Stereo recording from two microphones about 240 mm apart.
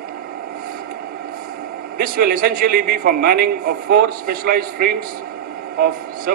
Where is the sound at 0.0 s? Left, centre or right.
Right.